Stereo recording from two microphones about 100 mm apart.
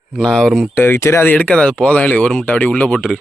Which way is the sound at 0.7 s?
20° left (ahead or behind).